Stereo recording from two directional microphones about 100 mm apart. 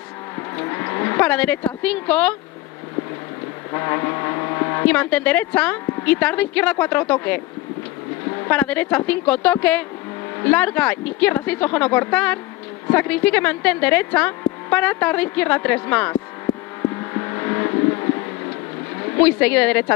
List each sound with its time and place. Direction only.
0.4 s livestock: 25° left (ahead or behind)
3.7 s vehicle: 25° left (ahead or behind)
4.8 s speech: 15° left (ahead or behind)
8.5 s speech: 15° left (ahead or behind)
16.9 s vehicle: 25° left (ahead or behind)
19.1 s speech: 15° left (ahead or behind)